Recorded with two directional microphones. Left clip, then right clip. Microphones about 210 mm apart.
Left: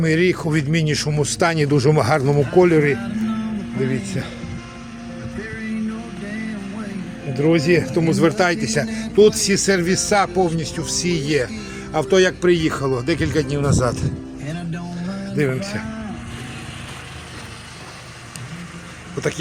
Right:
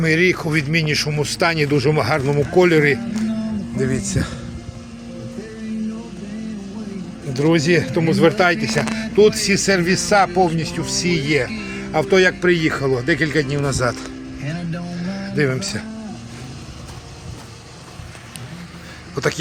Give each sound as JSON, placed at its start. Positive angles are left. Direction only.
{"t": 0.0, "sound": "speech", "side_deg": 10}
{"t": 2.6, "sound": "a man's voice", "side_deg": 5}
{"t": 7.3, "sound": "a man's voice", "side_deg": 0}
{"t": 15.0, "sound": "music", "side_deg": 0}
{"t": 19.1, "sound": "a man's voice", "side_deg": 0}